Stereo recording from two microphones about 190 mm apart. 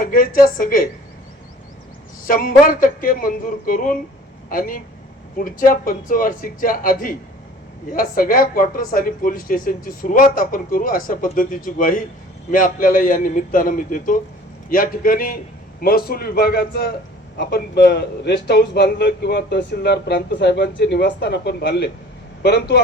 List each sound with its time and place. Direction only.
0.0 s a woman's voice: 50° left (ahead or behind)
2.2 s a woman's voice: 45° left (ahead or behind)